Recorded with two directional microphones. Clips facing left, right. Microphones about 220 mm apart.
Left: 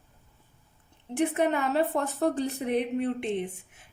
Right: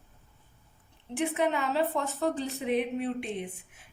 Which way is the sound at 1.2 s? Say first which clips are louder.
Left 3 dB; 50° left (ahead or behind).